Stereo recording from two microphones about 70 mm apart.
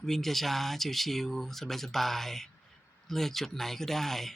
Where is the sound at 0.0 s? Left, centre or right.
Centre.